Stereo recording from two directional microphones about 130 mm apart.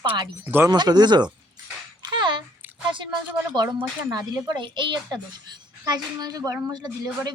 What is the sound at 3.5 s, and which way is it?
Speech, 35° right (ahead or behind).